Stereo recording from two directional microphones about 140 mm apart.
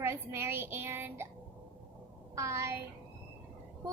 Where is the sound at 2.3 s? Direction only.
20° right (ahead or behind).